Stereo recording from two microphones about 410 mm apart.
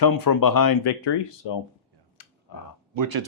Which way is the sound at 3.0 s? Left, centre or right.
Right.